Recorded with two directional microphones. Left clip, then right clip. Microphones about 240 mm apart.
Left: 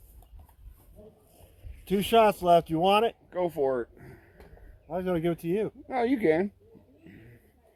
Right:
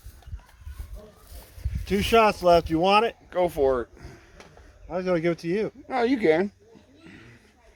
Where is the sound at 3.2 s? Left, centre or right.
Right.